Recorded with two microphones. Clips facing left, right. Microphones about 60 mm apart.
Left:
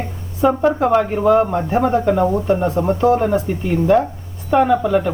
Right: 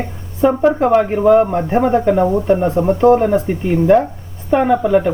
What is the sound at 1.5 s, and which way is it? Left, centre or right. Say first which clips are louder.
Speech: right 2 dB; right.